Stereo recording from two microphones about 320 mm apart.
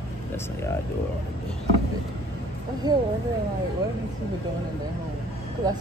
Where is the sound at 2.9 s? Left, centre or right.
Centre.